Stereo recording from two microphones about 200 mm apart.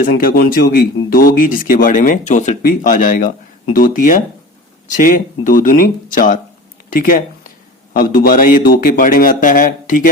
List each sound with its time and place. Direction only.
0.0 s speech: 45° left (ahead or behind)